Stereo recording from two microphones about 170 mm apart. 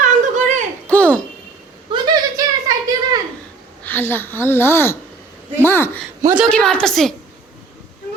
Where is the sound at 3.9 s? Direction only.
10° left (ahead or behind).